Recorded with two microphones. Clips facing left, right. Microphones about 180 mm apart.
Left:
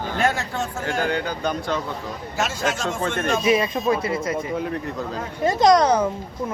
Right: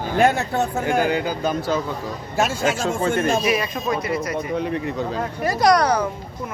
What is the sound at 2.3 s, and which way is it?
Speech, 55° right (ahead or behind).